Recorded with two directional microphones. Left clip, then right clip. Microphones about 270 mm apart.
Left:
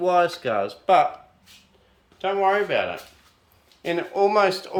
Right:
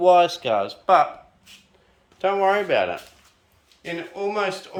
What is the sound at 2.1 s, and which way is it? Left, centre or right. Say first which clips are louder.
Speech: right 1 dB; right.